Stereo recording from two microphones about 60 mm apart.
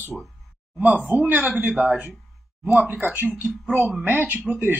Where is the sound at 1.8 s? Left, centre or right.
Right.